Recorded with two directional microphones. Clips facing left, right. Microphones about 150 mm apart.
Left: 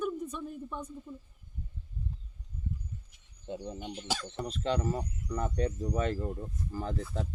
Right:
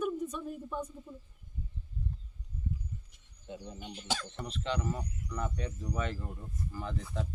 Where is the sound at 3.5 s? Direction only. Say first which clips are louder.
Left 5 dB; 30° left (ahead or behind).